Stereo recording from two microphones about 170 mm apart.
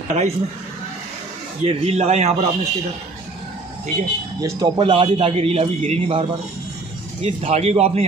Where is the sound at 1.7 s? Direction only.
35° right (ahead or behind).